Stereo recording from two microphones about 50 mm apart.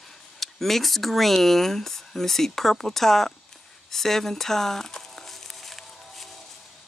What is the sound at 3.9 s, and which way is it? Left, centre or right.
Crumpling, centre.